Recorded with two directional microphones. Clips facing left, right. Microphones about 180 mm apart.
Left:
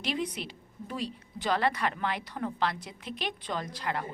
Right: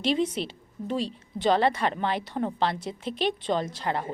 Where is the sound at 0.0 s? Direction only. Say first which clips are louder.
Right 7 dB; 25° right (ahead or behind).